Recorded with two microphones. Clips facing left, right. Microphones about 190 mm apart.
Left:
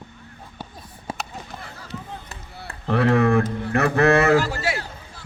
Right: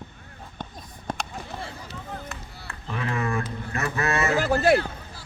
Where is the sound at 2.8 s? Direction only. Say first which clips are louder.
Left 11 dB; 70° left (ahead or behind).